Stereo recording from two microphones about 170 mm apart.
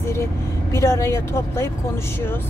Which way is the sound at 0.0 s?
15° left (ahead or behind).